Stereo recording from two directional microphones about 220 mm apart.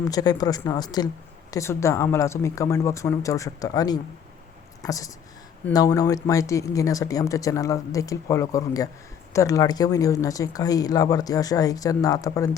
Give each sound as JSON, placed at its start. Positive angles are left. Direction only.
{"t": 0.0, "sound": "speech", "side_deg": 15}